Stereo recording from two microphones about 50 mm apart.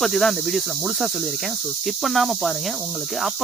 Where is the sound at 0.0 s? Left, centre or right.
Centre.